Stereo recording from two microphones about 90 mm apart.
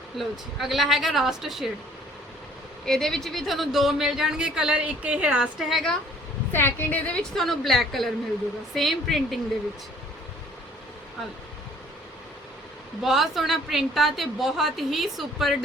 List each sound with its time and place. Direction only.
0.2 s speech: centre (ahead or behind)
2.8 s speech: 5° left (ahead or behind)
6.5 s a woman's voice: 25° left (ahead or behind)
7.2 s speech: 5° left (ahead or behind)
13.0 s speech: centre (ahead or behind)